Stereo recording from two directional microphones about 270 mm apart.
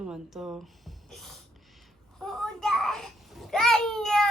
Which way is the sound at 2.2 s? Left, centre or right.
Centre.